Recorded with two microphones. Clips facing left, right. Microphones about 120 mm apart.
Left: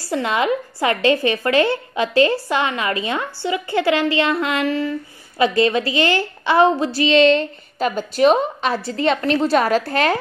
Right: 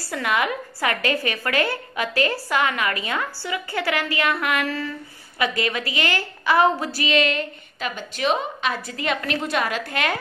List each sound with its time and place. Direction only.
0.1 s a woman's voice: 25° left (ahead or behind)